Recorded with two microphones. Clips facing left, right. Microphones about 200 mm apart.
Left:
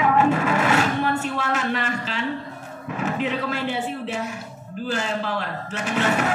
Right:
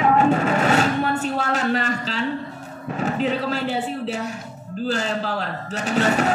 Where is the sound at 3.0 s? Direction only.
35° right (ahead or behind).